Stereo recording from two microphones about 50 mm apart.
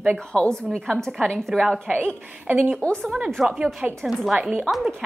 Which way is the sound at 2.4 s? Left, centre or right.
Right.